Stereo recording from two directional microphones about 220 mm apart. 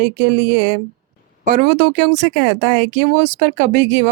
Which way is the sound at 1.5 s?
35° right (ahead or behind).